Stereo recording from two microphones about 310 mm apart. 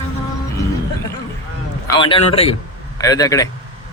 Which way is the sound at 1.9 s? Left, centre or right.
Centre.